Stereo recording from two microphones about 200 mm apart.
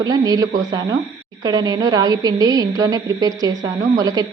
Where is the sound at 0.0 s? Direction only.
20° right (ahead or behind).